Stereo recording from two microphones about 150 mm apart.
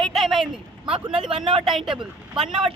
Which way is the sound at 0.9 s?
35° right (ahead or behind).